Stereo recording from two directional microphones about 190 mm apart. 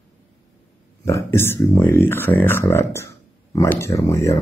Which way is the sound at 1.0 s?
15° left (ahead or behind).